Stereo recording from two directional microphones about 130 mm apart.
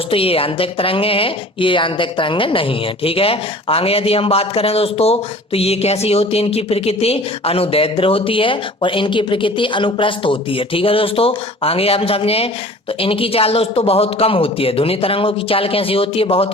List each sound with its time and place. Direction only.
0.1 s speech: 45° left (ahead or behind)